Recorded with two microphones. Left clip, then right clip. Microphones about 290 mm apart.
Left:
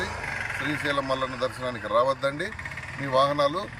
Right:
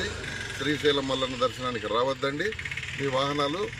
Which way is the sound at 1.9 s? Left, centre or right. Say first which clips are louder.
Left 4 dB; centre.